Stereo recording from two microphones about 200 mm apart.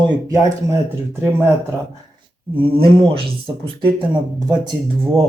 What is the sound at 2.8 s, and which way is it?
Speech, 25° right (ahead or behind).